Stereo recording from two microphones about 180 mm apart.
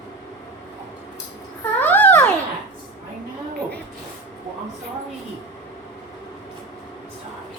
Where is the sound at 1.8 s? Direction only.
10° left (ahead or behind).